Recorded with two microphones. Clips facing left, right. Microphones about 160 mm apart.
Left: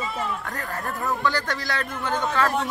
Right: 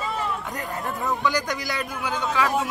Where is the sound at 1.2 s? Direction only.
15° right (ahead or behind).